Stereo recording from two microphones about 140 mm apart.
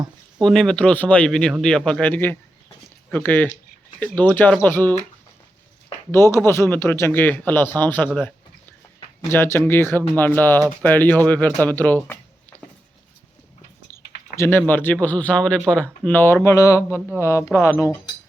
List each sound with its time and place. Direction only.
0.3 s speech: centre (ahead or behind)
6.1 s speech: 20° left (ahead or behind)
9.3 s speech: 15° left (ahead or behind)
12.0 s a sound: 15° left (ahead or behind)
14.3 s speech: 20° left (ahead or behind)